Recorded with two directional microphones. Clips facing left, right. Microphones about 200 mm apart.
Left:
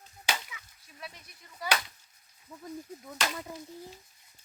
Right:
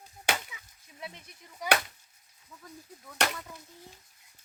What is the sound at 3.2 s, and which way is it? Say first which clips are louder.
Chop: right 4 dB; 70° right (ahead or behind).